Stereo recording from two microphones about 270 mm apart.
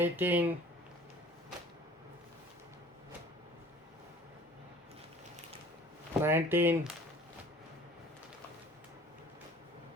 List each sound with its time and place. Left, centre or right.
0.0 s speech: centre
6.2 s speech: centre